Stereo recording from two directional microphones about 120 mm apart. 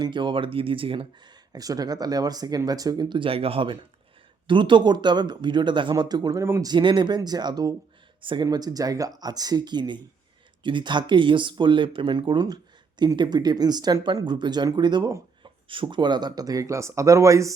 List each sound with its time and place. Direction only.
0.0 s speech: 40° right (ahead or behind)
1.5 s speech: 30° right (ahead or behind)
6.7 s speech: 40° right (ahead or behind)
8.2 s speech: 45° right (ahead or behind)
8.4 s speech: 30° right (ahead or behind)